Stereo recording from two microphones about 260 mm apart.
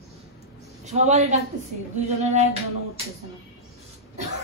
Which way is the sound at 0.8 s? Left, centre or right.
Right.